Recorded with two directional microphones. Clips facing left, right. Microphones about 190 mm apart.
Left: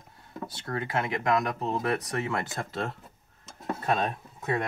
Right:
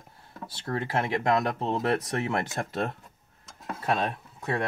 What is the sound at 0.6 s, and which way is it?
Speech, 30° right (ahead or behind).